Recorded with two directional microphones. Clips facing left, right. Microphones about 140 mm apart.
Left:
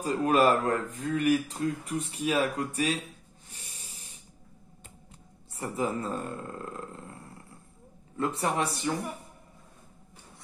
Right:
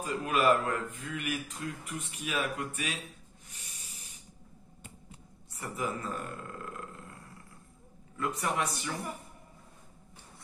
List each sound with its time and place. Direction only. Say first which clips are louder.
0.0 s speech: left 5 dB; 35° left (ahead or behind)
3.4 s a sound: left 4 dB; 30° left (ahead or behind)
5.5 s speech: left 5 dB; 30° left (ahead or behind)
8.2 s speech: left 4 dB; 30° left (ahead or behind)